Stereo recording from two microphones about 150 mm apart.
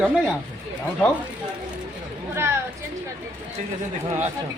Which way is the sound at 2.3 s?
15° right (ahead or behind).